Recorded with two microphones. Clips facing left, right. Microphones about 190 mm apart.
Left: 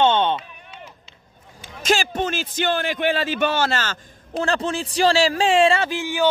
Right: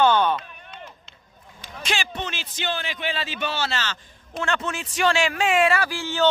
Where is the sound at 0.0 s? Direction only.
25° left (ahead or behind).